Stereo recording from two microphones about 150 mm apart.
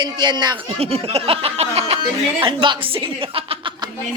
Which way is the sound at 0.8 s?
40° right (ahead or behind).